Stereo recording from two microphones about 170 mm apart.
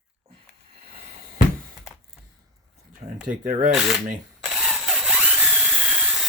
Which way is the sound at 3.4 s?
50° right (ahead or behind).